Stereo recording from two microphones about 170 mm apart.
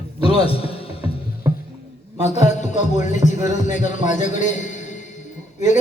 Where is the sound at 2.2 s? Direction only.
40° left (ahead or behind).